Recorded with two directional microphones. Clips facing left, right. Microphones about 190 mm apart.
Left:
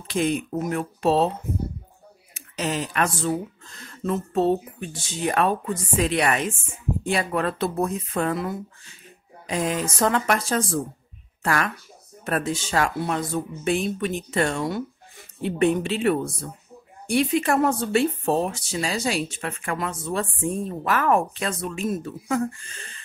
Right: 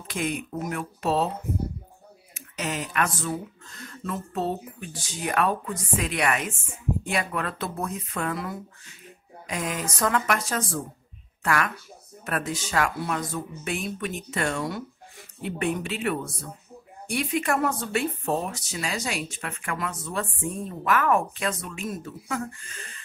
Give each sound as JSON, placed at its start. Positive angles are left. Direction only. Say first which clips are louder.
{"t": 0.1, "sound": "speech", "louder": "left 6 dB", "side_deg": 30}
{"t": 2.3, "sound": "speech", "louder": "left 4 dB", "side_deg": 30}